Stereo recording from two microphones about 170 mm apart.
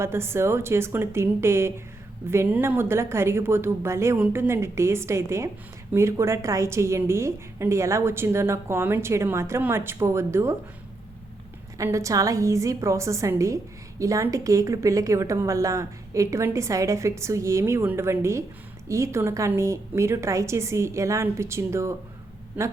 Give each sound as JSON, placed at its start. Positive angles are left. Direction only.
{"t": 0.0, "sound": "a woman's voice", "side_deg": -15}
{"t": 11.8, "sound": "a woman's voice", "side_deg": -20}